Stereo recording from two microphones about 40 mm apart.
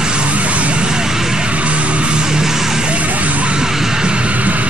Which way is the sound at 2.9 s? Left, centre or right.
Right.